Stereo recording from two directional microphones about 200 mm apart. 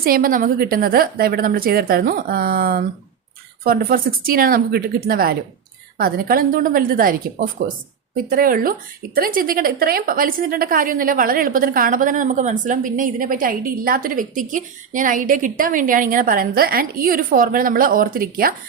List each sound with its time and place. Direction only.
0.0 s a woman's voice: 45° right (ahead or behind)